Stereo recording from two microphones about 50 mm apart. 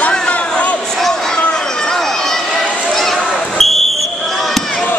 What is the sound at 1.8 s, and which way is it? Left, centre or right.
Run, centre.